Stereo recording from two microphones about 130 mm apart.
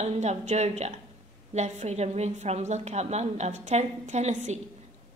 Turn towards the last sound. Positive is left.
turn(degrees=-60)  # may be behind; listen again after turning